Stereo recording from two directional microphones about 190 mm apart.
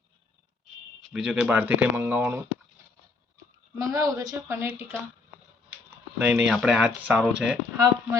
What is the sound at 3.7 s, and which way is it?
Speech, 15° right (ahead or behind).